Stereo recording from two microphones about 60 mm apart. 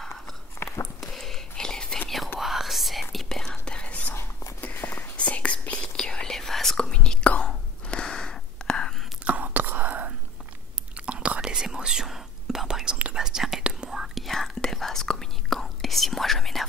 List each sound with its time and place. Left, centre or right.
1.0 s whispering: centre
2.4 s whispering: centre
9.2 s whispering: right; by 16.6 s centre